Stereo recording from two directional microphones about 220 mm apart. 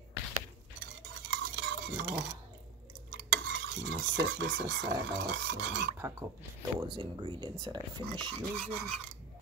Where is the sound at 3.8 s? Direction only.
50° right (ahead or behind).